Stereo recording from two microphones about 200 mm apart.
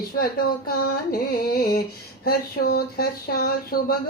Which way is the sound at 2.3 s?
50° left (ahead or behind).